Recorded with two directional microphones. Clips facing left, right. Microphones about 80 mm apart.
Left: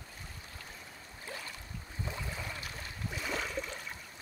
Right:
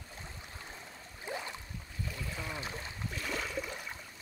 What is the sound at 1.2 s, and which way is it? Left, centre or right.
Boat, right.